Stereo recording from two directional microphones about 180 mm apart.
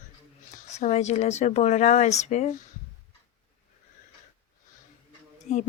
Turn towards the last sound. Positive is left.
turn(degrees=40)  # may be behind; listen again after turning